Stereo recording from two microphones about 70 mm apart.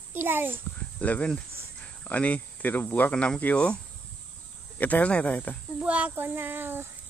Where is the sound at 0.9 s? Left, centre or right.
Centre.